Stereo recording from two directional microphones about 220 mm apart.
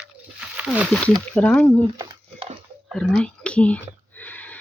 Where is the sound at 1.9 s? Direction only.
25° right (ahead or behind).